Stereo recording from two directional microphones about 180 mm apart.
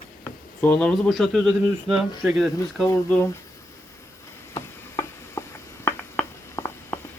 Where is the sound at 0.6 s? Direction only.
5° left (ahead or behind).